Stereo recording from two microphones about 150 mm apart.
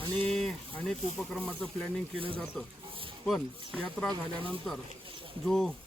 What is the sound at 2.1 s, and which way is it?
Speech, 35° right (ahead or behind).